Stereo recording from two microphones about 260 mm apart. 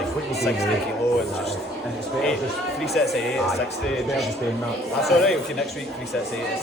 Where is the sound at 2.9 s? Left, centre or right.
Centre.